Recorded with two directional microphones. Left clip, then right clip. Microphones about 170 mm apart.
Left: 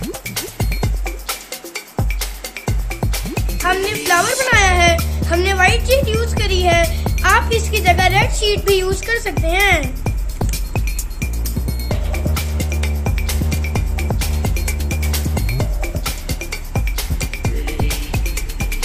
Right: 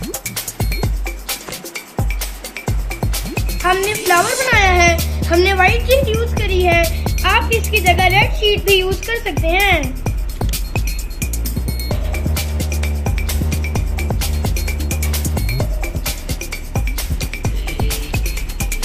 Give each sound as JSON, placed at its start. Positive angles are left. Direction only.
{"t": 0.0, "sound": "music", "side_deg": 0}
{"t": 2.6, "sound": "music", "side_deg": 0}
{"t": 3.6, "sound": "a child's voice", "side_deg": 20}
{"t": 4.2, "sound": "speech", "side_deg": 0}
{"t": 4.5, "sound": "a child's voice", "side_deg": 20}
{"t": 7.2, "sound": "music", "side_deg": 25}
{"t": 7.5, "sound": "a child's voice", "side_deg": 25}
{"t": 10.0, "sound": "music", "side_deg": 0}